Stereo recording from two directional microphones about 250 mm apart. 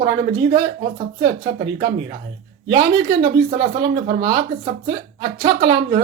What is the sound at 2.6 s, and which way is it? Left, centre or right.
Speech, centre.